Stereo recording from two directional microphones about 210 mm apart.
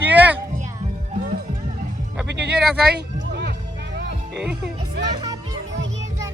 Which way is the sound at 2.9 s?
50° right (ahead or behind).